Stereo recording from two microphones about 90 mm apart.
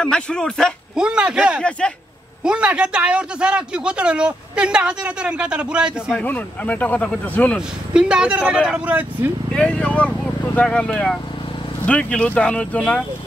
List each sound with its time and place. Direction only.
0.0 s speech: 10° left (ahead or behind)
0.9 s speech: 10° right (ahead or behind)
1.8 s speech: 10° left (ahead or behind)
2.4 s speech: 10° right (ahead or behind)
6.1 s speech: 15° left (ahead or behind)
7.9 s speech: 10° right (ahead or behind)
9.5 s speech: 10° left (ahead or behind)